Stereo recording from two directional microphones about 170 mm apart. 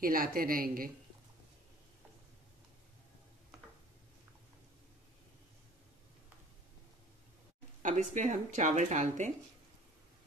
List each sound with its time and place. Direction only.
0.0 s a woman's voice: 55° right (ahead or behind)
7.8 s speech: 45° right (ahead or behind)